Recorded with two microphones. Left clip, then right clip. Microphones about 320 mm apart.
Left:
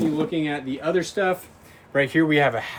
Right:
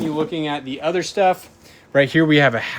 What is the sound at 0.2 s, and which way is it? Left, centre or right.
Speech, centre.